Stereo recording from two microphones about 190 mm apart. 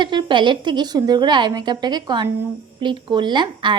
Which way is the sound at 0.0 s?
25° right (ahead or behind).